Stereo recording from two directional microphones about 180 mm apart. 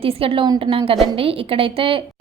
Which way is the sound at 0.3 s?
30° right (ahead or behind).